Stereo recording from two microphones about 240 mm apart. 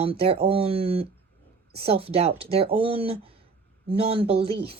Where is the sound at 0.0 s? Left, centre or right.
Right.